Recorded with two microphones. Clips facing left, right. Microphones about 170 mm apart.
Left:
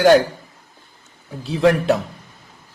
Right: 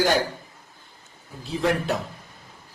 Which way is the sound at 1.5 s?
80° left.